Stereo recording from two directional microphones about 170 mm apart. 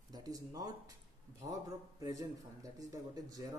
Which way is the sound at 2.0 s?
20° right (ahead or behind).